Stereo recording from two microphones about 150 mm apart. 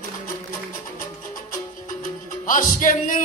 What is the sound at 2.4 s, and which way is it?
Mantra, 60° left (ahead or behind).